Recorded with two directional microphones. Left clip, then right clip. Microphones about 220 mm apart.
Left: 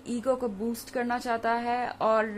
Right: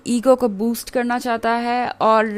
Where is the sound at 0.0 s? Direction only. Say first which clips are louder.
Right 13 dB; 50° right (ahead or behind).